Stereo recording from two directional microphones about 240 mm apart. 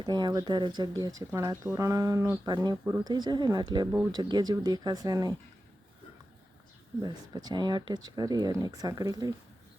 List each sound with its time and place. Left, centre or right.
0.0 s speech: centre
7.0 s speech: centre